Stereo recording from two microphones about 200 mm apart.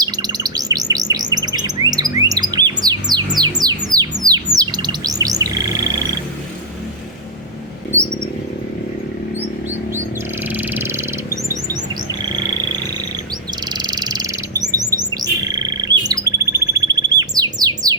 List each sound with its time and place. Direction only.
0.0 s bird: 20° right (ahead or behind)
10.5 s a sound: 10° right (ahead or behind)
13.7 s bird: 20° right (ahead or behind)